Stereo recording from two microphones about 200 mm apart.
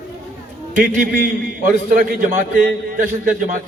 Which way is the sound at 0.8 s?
45° right (ahead or behind).